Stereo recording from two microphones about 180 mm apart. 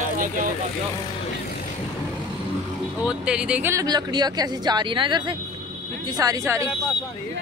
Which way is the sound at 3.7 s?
20° right (ahead or behind).